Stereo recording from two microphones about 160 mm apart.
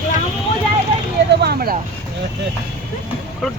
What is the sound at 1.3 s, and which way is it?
Vehicle, 90° right.